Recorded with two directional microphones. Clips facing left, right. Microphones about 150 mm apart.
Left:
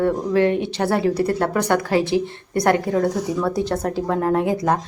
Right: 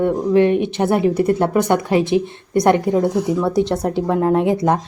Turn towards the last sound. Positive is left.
turn(degrees=-25)  # may be behind; listen again after turning